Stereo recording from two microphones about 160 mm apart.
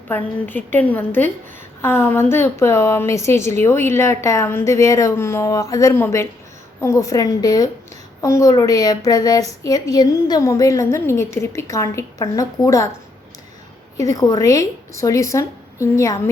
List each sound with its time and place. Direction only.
0.1 s a woman's voice: 10° left (ahead or behind)
13.9 s a woman's voice: 20° left (ahead or behind)